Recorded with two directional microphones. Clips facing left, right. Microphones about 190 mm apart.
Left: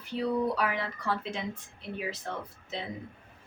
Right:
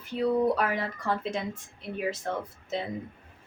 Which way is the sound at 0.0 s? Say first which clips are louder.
Right 4 dB; 45° right (ahead or behind).